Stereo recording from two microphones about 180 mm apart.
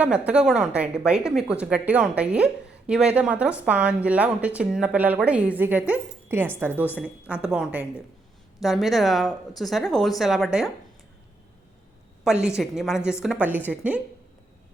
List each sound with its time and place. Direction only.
0.0 s a woman's voice: 5° right (ahead or behind)
12.2 s a woman's voice: 5° right (ahead or behind)